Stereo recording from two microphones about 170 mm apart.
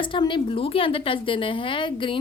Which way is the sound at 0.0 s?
30° left (ahead or behind).